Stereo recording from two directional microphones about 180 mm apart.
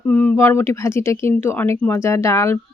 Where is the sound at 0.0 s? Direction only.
10° left (ahead or behind).